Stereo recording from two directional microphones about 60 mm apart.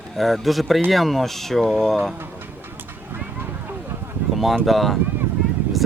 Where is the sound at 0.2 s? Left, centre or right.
Centre.